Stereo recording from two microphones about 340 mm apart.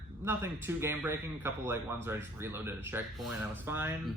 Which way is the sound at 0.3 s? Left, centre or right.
Centre.